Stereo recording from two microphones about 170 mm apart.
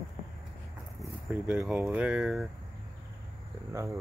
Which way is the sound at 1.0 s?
5° right (ahead or behind).